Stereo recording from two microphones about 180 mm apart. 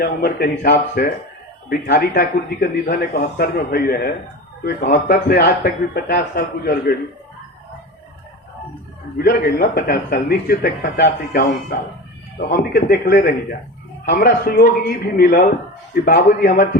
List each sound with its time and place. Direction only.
0.0 s a man's voice: 55° left (ahead or behind)
9.1 s a man's voice: 60° left (ahead or behind)